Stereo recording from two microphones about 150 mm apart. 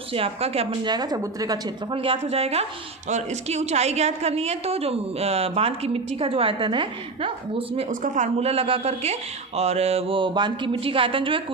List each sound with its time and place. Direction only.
0.1 s a woman's voice: 40° right (ahead or behind)
0.9 s a woman's voice: 25° right (ahead or behind)
7.9 s a woman's voice: 60° right (ahead or behind); by 11.4 s 35° right (ahead or behind)